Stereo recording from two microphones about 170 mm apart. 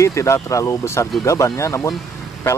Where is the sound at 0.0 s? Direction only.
15° left (ahead or behind).